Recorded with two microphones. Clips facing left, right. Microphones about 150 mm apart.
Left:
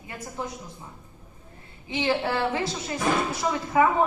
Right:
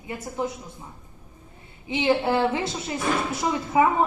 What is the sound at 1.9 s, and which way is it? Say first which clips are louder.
A woman's voice: right 4 dB; 20° right (ahead or behind).